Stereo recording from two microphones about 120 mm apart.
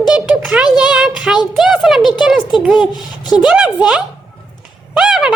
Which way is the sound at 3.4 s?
5° right (ahead or behind).